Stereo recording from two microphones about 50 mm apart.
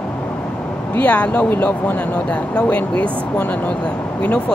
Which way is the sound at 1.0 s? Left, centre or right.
Left.